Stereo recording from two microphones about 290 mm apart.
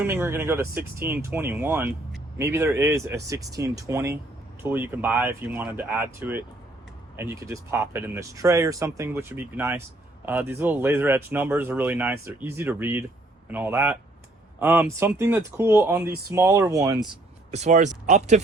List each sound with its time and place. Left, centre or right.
0.0 s speech: centre
17.5 s speech: right